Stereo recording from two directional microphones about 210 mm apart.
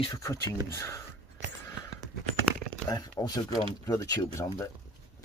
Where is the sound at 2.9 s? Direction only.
20° left (ahead or behind).